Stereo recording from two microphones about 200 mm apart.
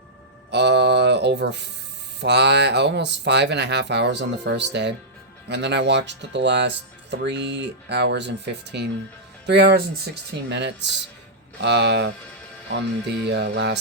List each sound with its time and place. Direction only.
0.5 s a sound: 60° right (ahead or behind)
2.2 s speech: 60° right (ahead or behind)
13.2 s speech: 60° right (ahead or behind)